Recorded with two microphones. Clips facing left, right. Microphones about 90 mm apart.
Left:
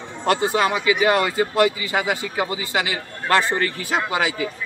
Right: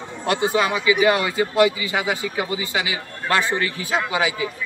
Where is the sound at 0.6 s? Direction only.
50° left (ahead or behind).